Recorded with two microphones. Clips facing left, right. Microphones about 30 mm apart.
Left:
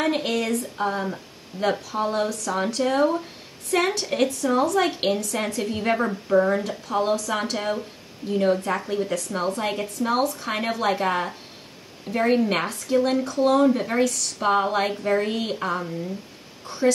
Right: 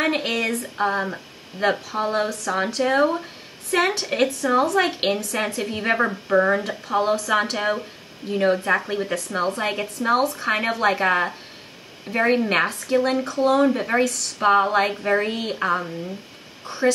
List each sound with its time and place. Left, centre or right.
0.0 s a woman's voice: right
5.9 s speech: right
6.7 s a woman's voice: right
14.0 s a woman's voice: centre
15.6 s a woman's voice: right